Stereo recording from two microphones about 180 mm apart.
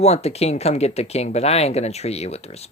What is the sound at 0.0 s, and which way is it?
Speech, 35° left (ahead or behind).